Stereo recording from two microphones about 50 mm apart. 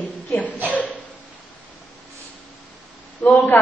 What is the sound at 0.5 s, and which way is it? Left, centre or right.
Speech, right.